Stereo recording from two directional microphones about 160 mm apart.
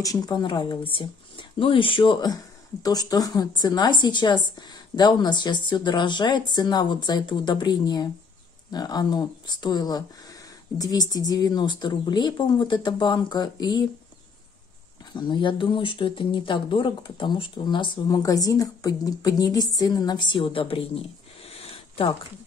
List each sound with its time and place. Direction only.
0.0 s speech: 25° left (ahead or behind)
15.1 s speech: 30° left (ahead or behind)
21.5 s a sound: 35° left (ahead or behind)